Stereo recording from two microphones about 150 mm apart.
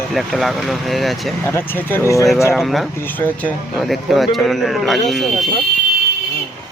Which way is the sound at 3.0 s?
10° left (ahead or behind).